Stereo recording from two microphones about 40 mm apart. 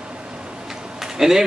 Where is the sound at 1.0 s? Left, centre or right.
Centre.